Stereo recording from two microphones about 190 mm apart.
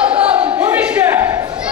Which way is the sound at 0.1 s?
5° right (ahead or behind).